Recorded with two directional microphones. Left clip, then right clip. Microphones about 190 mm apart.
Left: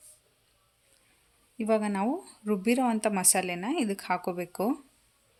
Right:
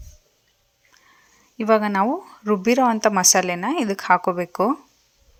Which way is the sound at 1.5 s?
15° right (ahead or behind).